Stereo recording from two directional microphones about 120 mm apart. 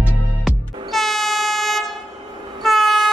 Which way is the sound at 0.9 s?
Centre (ahead or behind).